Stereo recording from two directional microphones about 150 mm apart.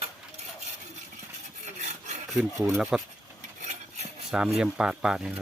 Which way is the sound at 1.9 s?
50° right (ahead or behind).